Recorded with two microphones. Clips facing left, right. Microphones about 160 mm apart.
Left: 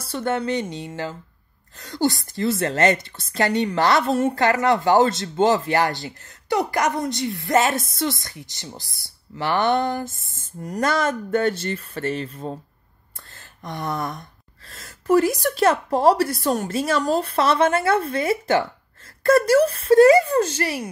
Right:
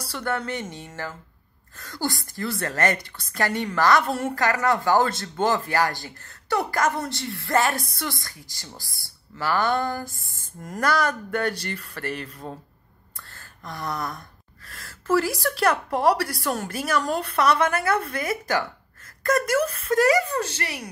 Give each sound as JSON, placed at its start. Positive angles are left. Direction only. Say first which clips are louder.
{"t": 0.1, "sound": "a woman's voice", "louder": "left 5 dB", "side_deg": 20}
{"t": 13.3, "sound": "a sound", "louder": "left 5 dB", "side_deg": 20}
{"t": 14.7, "sound": "a woman's voice", "louder": "left 4 dB", "side_deg": 20}